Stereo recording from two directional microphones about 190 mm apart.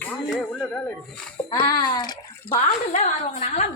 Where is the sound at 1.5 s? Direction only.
20° left (ahead or behind).